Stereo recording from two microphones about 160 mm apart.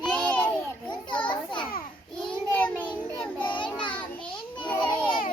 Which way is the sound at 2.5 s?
10° left (ahead or behind).